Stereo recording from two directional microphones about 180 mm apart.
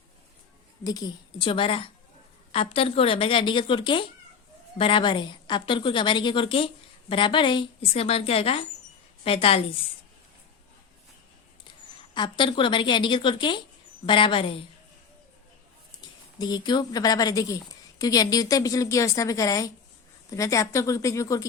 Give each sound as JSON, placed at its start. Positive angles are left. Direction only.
{"t": 0.9, "sound": "a woman's voice", "side_deg": 20}
{"t": 12.1, "sound": "a woman's voice", "side_deg": 25}
{"t": 16.4, "sound": "a woman's voice", "side_deg": 25}